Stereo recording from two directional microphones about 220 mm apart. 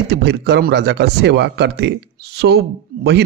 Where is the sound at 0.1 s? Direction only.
50° right (ahead or behind).